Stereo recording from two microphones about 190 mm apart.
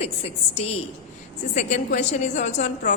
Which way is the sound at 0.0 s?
35° left (ahead or behind).